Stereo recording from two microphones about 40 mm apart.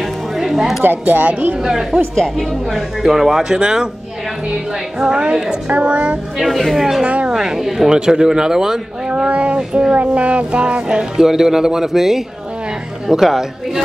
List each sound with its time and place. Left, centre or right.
0.4 s music: centre
0.8 s speech: right
1.6 s speech: centre
2.1 s speech: centre
2.7 s speech: centre
5.0 s a woman's voice: right
6.3 s speech: centre
7.0 s speech: right
7.2 s a woman's voice: centre
9.1 s a woman's voice: right
9.9 s speech: right; by 13.5 s centre